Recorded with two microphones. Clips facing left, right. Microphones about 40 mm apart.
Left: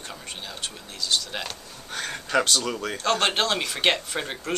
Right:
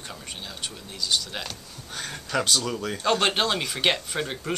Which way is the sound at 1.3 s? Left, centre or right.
Centre.